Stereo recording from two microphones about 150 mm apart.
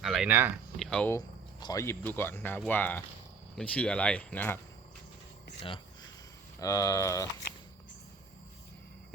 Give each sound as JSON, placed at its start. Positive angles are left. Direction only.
{"t": 0.0, "sound": "speech", "side_deg": 0}
{"t": 0.8, "sound": "speech", "side_deg": 5}
{"t": 1.5, "sound": "speech", "side_deg": 25}
{"t": 6.6, "sound": "speech", "side_deg": 20}